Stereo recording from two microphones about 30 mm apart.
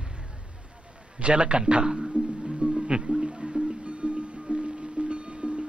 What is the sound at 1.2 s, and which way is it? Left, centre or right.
Speech, right.